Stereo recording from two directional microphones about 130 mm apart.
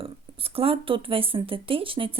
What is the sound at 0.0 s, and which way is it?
Speech, 45° right (ahead or behind).